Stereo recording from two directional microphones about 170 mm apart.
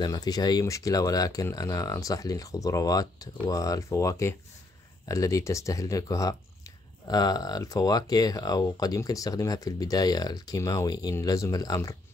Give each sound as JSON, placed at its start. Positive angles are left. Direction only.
{"t": 0.0, "sound": "speech", "side_deg": 20}